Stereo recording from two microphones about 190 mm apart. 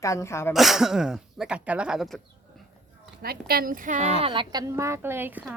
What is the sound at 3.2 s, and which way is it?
Speech, 55° right (ahead or behind).